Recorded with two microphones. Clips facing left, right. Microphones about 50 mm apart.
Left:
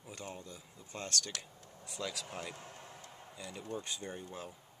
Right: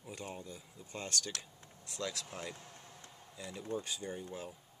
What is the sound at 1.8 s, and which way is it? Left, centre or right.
Speech, centre.